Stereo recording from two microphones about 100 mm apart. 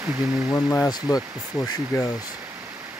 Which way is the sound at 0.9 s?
40° left (ahead or behind).